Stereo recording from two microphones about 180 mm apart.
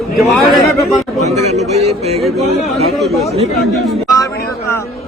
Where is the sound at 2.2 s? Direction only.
Centre (ahead or behind).